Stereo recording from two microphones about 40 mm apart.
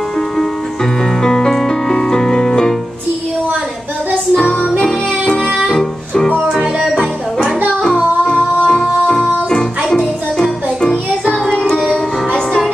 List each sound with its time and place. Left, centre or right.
1.2 s music: centre
4.4 s music: centre
6.2 s music: left
8.7 s music: centre